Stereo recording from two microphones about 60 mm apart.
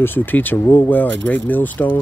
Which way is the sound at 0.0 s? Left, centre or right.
Left.